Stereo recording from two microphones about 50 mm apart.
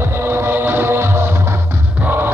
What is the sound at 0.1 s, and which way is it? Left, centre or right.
Music, right.